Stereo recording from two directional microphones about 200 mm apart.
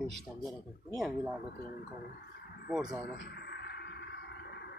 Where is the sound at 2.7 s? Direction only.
5° right (ahead or behind).